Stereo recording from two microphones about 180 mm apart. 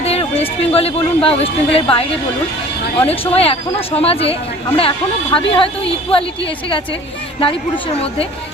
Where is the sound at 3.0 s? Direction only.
35° left (ahead or behind).